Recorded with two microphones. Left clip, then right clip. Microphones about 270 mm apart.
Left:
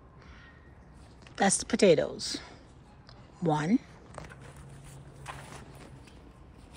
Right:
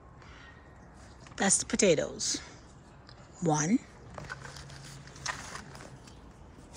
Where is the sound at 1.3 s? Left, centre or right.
Centre.